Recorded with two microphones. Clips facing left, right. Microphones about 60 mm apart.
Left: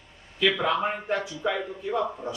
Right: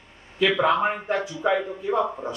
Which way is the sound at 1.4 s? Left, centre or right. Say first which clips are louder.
Right 5 dB; centre.